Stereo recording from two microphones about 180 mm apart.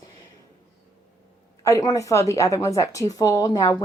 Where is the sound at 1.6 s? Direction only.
15° left (ahead or behind).